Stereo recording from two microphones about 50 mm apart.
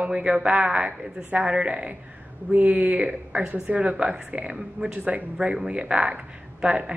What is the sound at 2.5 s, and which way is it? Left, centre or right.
A woman's voice, right.